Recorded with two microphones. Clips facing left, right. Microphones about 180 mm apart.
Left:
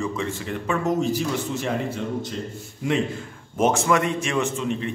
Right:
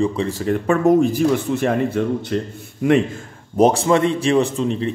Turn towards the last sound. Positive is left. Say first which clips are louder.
# right 5 dB
turn(degrees=-35)  # may be behind; listen again after turning